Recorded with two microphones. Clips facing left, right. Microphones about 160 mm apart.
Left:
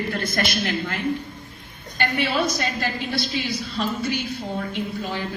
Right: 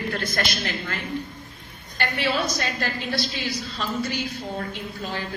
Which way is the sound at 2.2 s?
55° left (ahead or behind).